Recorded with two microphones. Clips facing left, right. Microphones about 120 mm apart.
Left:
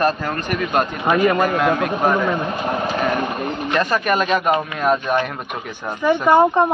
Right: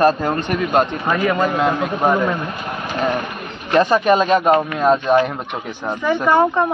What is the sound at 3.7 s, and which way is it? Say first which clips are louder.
Speech: right 6 dB; 25° right (ahead or behind).